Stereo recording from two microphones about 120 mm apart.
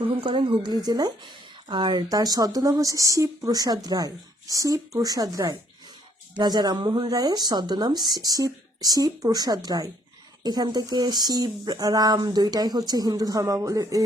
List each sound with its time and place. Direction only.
0.0 s a woman's voice: 50° right (ahead or behind); by 14.0 s 25° right (ahead or behind)